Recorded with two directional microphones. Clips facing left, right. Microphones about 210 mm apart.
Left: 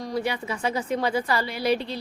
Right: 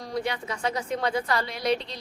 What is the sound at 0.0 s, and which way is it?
A woman's voice, 5° left (ahead or behind).